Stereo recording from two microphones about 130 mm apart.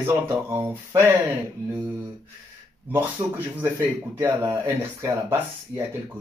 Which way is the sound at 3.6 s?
20° right (ahead or behind).